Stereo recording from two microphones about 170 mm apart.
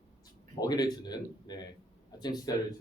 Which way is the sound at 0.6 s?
25° left (ahead or behind).